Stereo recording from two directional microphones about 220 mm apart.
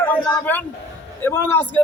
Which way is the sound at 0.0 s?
10° left (ahead or behind).